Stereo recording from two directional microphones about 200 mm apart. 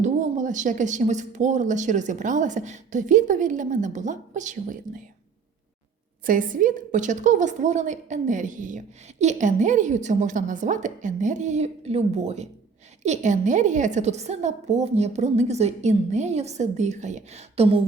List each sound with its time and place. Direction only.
0.0 s a woman's voice: 40° right (ahead or behind)
6.2 s a woman's voice: 45° right (ahead or behind)